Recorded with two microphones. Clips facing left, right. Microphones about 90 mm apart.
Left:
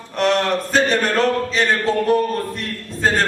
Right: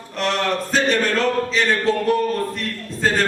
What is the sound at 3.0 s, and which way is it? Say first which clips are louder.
Speech: left 1 dB; 35° left (ahead or behind).